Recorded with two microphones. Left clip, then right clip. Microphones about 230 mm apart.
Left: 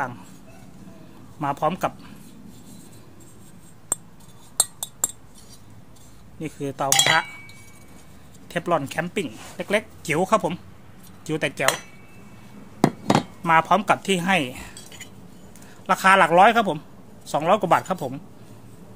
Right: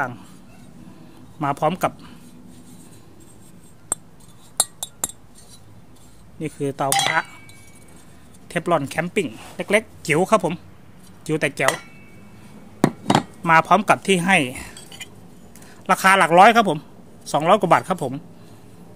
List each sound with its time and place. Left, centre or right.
1.4 s speech: right
6.4 s speech: right
8.5 s speech: right
12.8 s chop: right
15.6 s a man's voice: right